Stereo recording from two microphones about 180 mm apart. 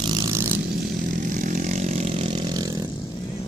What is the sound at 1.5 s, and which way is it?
Vehicle, 45° right (ahead or behind).